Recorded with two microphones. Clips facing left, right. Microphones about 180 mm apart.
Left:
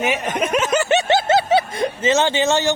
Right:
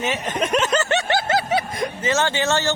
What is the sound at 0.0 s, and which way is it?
Speech, 10° left (ahead or behind).